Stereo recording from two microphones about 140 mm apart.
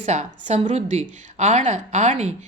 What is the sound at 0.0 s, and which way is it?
A woman's voice, 55° right (ahead or behind).